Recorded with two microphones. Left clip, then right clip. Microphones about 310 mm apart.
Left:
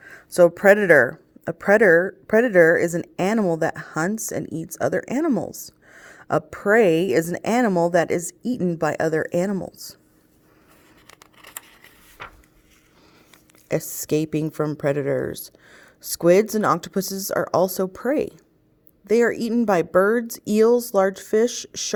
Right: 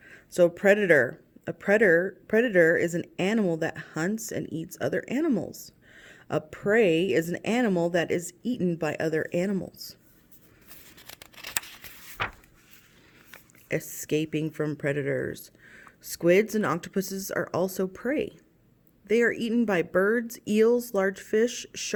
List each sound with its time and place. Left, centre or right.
0.0 s speech: centre
11.0 s scissors: right
13.7 s speech: centre